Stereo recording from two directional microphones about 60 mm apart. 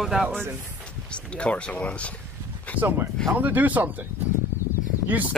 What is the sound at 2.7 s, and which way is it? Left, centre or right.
Speech, right.